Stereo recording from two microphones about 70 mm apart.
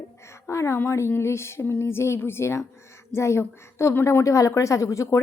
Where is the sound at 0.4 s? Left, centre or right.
Left.